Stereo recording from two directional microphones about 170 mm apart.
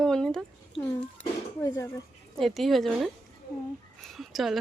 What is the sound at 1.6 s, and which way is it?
Speech, 15° left (ahead or behind).